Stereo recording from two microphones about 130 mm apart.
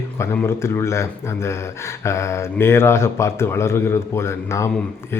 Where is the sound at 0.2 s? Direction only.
20° left (ahead or behind).